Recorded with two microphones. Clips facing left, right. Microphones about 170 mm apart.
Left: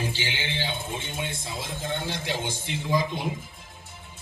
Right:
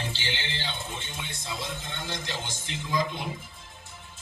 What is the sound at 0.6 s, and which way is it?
A man's voice, 50° left (ahead or behind).